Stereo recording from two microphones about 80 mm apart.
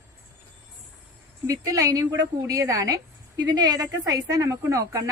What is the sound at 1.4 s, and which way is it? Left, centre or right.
A woman's voice, right.